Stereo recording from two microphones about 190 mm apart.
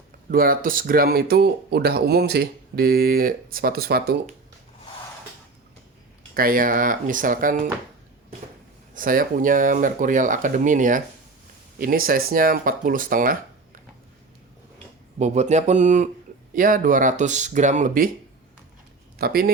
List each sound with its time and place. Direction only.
0.3 s speech: 50° right (ahead or behind)
6.3 s speech: 50° right (ahead or behind)
9.0 s speech: 45° right (ahead or behind)
15.2 s speech: 35° right (ahead or behind)
19.2 s speech: 55° right (ahead or behind)